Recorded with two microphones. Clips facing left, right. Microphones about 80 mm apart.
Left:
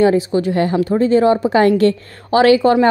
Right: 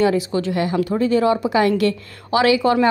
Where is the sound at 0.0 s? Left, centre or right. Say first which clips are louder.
Left 4 dB; left.